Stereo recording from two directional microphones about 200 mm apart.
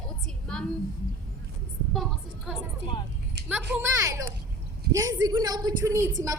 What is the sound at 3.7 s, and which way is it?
A woman's voice, 15° right (ahead or behind).